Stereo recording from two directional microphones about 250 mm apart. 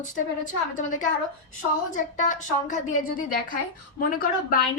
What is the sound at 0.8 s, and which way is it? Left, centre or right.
A woman's voice, left.